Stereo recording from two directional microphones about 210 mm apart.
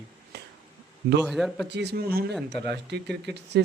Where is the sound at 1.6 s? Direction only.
50° right (ahead or behind).